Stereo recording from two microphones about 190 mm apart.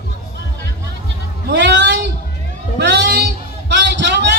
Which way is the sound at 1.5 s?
65° right (ahead or behind).